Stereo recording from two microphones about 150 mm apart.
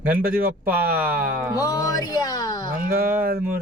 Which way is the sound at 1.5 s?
25° left (ahead or behind).